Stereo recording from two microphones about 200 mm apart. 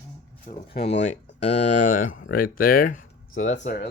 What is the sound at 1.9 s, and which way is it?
Speech, 45° left (ahead or behind).